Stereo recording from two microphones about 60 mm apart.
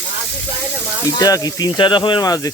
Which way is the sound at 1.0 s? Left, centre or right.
Left.